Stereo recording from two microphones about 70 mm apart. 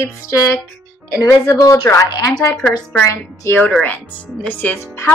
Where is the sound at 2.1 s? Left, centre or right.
Left.